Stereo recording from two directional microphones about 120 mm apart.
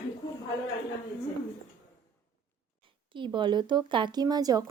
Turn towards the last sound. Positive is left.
turn(degrees=-30)  # may be behind; listen again after turning